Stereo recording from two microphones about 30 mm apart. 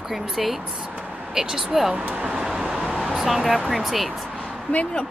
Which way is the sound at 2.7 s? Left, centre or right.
Right.